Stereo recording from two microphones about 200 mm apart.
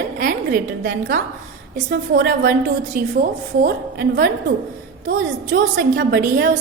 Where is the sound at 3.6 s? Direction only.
50° right (ahead or behind).